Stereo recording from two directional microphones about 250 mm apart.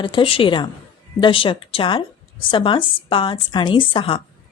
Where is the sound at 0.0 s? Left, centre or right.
Centre.